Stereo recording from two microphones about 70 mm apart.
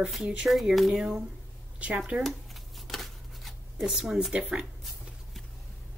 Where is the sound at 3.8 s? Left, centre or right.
Centre.